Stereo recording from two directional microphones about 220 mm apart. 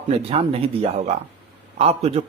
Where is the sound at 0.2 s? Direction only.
25° right (ahead or behind).